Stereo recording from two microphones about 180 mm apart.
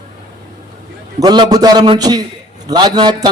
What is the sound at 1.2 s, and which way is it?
A man's voice, 20° right (ahead or behind).